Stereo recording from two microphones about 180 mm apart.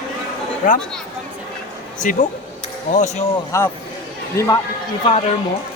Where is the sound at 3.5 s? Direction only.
15° left (ahead or behind).